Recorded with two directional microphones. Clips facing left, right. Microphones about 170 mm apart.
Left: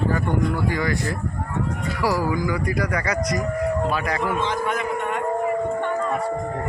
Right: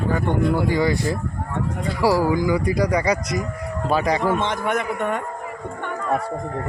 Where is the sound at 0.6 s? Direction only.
25° right (ahead or behind).